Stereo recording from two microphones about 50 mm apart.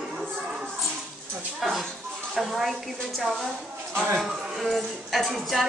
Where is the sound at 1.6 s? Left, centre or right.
Centre.